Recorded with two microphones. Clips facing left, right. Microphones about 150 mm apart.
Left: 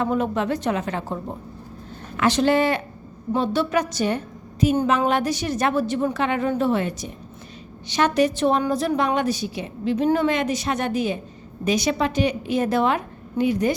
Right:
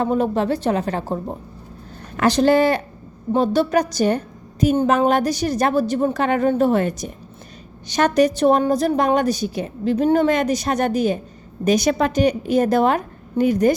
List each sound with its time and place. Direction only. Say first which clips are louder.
0.0 s a woman's voice: right 3 dB; 35° right (ahead or behind)